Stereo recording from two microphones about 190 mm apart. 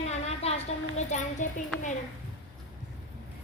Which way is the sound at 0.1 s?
35° left (ahead or behind).